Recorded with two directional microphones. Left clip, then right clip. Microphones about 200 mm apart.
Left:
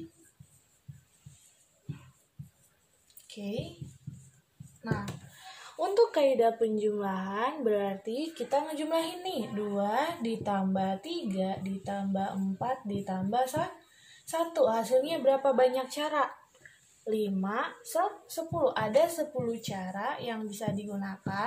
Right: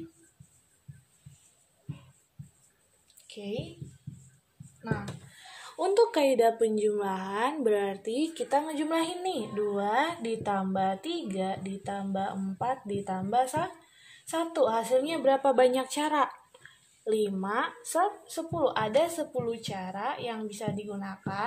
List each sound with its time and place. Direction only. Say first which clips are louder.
3.3 s a child's voice: right 1 dB; 40° right (ahead or behind)
5.8 s a woman's voice: right 1 dB; 45° right (ahead or behind)